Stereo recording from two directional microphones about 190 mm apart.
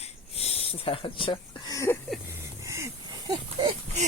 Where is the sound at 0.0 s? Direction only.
30° left (ahead or behind); by 2.0 s 15° left (ahead or behind).